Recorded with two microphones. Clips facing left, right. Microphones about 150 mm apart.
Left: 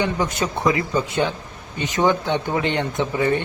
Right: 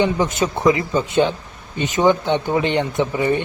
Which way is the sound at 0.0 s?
20° right (ahead or behind).